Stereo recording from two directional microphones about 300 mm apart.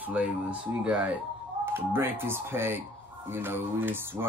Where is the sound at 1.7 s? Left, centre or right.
Centre.